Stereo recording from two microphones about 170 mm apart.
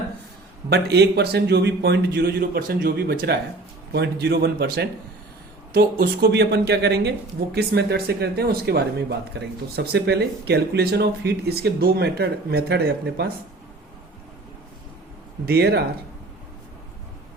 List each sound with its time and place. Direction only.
0.7 s speech: 75° right (ahead or behind)
15.4 s speech: 70° right (ahead or behind)